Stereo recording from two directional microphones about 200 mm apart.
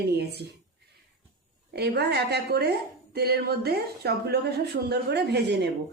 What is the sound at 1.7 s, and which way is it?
A woman's voice, 55° right (ahead or behind).